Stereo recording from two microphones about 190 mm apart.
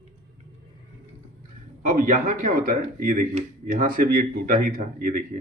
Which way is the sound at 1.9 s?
45° right (ahead or behind).